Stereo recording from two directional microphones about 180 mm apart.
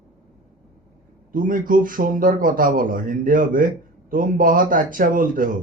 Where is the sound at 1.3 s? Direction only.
50° right (ahead or behind).